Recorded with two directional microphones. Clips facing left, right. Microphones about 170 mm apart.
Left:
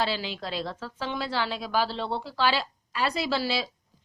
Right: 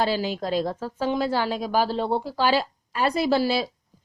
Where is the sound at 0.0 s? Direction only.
45° right (ahead or behind).